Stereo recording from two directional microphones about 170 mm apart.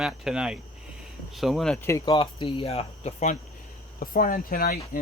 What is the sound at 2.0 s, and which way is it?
Speech, 30° left (ahead or behind).